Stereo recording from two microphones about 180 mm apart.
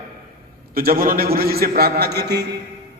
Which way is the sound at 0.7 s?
55° right (ahead or behind).